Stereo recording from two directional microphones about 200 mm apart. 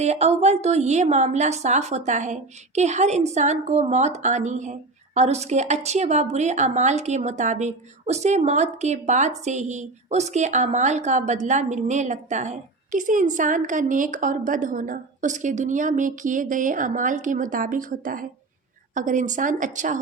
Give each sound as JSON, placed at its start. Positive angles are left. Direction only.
{"t": 0.0, "sound": "a woman's voice", "side_deg": -30}